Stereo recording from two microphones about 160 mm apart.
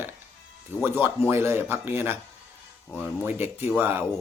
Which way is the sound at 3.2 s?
15° right (ahead or behind).